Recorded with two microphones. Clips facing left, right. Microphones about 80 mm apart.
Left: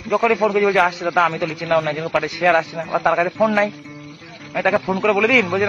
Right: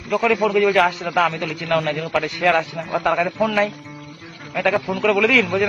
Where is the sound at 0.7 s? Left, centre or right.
Centre.